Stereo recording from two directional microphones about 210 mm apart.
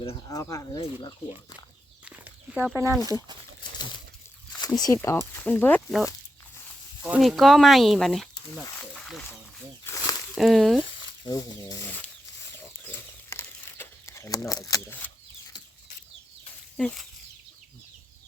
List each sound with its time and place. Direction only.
0.3 s speech: 15° left (ahead or behind)
0.8 s speech: 30° left (ahead or behind)
2.0 s a sound: 5° right (ahead or behind)
3.8 s a sound: 20° left (ahead or behind)
4.6 s speech: 20° left (ahead or behind); by 8.6 s centre (ahead or behind)
9.8 s a sound: 15° left (ahead or behind)
10.3 s speech: centre (ahead or behind)
11.3 s speech: 15° left (ahead or behind)
12.9 s crumpling: 10° left (ahead or behind)
16.7 s speech: 5° left (ahead or behind)